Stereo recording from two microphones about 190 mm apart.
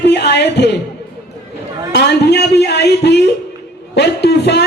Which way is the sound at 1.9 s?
60° left (ahead or behind).